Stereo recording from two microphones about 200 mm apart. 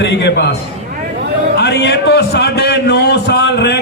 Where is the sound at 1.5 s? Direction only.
55° left (ahead or behind).